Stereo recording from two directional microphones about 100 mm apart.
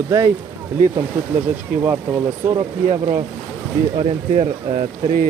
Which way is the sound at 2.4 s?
20° right (ahead or behind).